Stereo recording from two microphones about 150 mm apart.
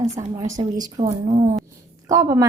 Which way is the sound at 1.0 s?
45° right (ahead or behind).